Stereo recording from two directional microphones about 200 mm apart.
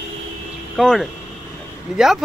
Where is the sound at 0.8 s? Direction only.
Centre (ahead or behind).